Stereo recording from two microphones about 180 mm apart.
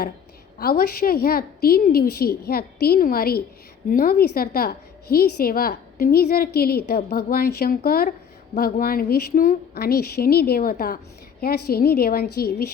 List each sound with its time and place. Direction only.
0.6 s a woman's voice: 55° left (ahead or behind)